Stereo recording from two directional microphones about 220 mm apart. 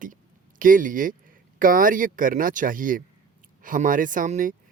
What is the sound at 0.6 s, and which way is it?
Speech, 40° right (ahead or behind).